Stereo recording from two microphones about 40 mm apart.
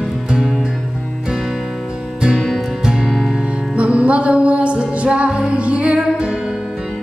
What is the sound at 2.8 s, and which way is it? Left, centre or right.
Music, centre.